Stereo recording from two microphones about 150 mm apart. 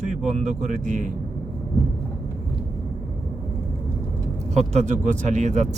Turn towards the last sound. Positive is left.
turn(degrees=-50)  # may be behind; listen again after turning